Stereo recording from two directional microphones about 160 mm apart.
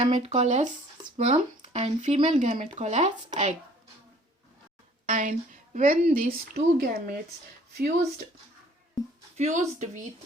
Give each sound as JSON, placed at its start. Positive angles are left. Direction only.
{"t": 0.0, "sound": "speech", "side_deg": -45}
{"t": 5.0, "sound": "a woman's voice", "side_deg": -50}
{"t": 9.4, "sound": "speech", "side_deg": -45}